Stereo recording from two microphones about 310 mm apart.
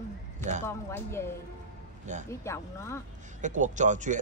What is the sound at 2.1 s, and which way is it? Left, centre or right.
Speech, right.